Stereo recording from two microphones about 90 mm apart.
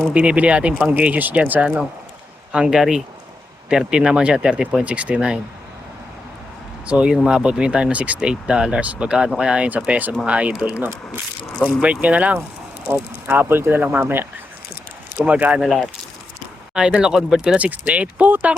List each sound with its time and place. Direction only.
0.1 s speech: 15° right (ahead or behind)
6.8 s speech: 10° right (ahead or behind)
16.7 s speech: 10° right (ahead or behind)